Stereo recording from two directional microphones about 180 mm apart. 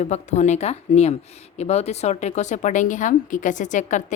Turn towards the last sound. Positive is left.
turn(degrees=45)  # may be behind; listen again after turning